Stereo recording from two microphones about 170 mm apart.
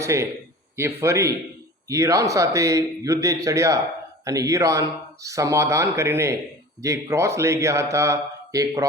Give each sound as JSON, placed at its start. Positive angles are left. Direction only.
{"t": 0.0, "sound": "speech", "side_deg": -15}